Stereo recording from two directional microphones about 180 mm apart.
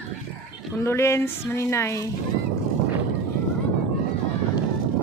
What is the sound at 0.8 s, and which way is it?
Speech, 15° left (ahead or behind).